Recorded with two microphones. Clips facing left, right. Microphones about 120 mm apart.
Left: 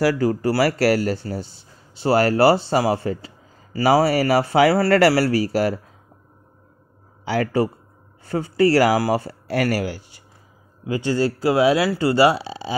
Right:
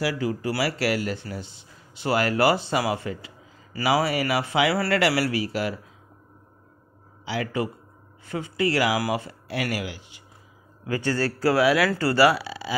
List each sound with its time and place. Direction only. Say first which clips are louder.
0.0 s speech: left 7 dB; 45° left (ahead or behind)
7.2 s a man's voice: left 7 dB; 40° left (ahead or behind)
10.9 s speech: left 4 dB; 15° left (ahead or behind)